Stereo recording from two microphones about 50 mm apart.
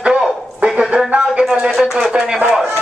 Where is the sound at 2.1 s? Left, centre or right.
Centre.